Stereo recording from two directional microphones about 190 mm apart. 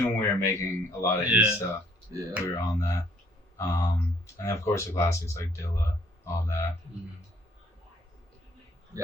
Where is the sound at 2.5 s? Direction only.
15° left (ahead or behind).